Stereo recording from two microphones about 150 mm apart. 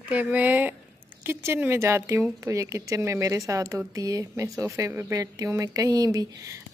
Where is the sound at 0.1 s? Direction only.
10° right (ahead or behind).